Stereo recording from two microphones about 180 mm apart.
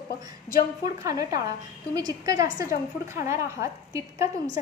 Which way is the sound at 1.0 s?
20° right (ahead or behind).